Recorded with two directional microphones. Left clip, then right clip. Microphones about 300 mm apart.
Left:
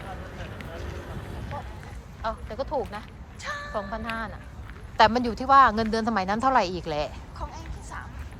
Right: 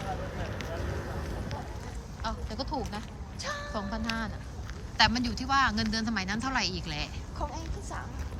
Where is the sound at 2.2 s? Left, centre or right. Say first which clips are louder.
Left 5 dB; centre.